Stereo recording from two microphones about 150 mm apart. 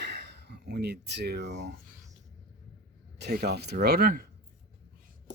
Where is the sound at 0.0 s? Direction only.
90° right.